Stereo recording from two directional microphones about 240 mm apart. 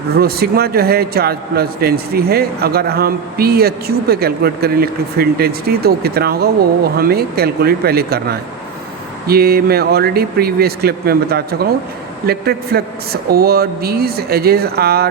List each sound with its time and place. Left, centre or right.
0.2 s a man's voice: right